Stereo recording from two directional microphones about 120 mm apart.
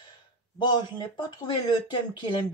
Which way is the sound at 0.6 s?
40° left (ahead or behind).